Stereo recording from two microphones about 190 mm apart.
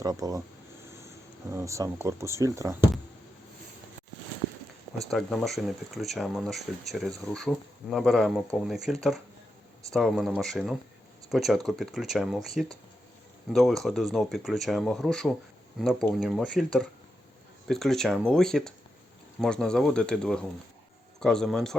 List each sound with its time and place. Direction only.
0.0 s speech: 20° right (ahead or behind)
1.5 s speech: 15° right (ahead or behind)
5.1 s speech: centre (ahead or behind)
17.7 s speech: centre (ahead or behind)